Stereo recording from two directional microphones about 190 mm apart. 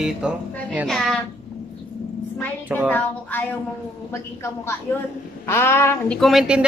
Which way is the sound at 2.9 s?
10° left (ahead or behind).